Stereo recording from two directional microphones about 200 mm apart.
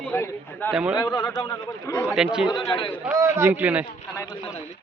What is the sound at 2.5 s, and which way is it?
Speech, 25° left (ahead or behind).